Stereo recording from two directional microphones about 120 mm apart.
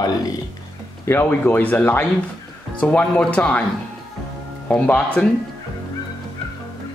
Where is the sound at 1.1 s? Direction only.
20° left (ahead or behind).